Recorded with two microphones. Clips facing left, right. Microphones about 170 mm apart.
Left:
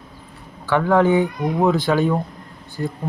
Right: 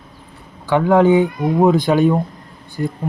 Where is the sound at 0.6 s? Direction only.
15° right (ahead or behind).